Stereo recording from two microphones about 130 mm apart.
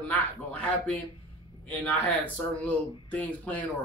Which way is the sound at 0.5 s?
10° left (ahead or behind).